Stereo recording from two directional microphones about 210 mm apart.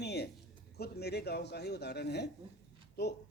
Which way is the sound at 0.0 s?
50° left (ahead or behind).